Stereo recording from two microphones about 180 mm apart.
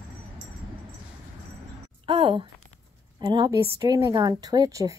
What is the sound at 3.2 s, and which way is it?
Speech, 25° right (ahead or behind).